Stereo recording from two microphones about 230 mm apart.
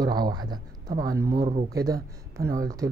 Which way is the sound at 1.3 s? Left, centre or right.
Right.